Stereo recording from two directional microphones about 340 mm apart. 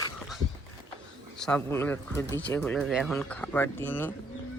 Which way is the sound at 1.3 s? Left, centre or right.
Centre.